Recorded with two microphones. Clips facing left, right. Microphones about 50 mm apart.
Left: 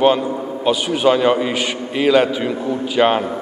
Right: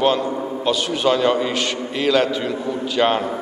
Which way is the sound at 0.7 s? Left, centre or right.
Centre.